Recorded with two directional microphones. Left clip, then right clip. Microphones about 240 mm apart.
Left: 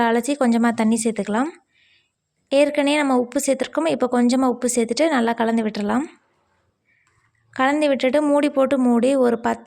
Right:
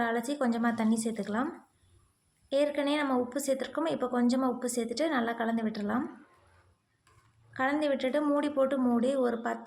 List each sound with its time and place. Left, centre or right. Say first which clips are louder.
0.0 s speech: left 11 dB; left
7.5 s speech: left 10 dB; left